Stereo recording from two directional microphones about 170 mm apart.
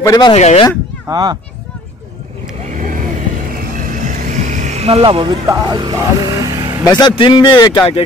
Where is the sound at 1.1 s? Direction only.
25° right (ahead or behind).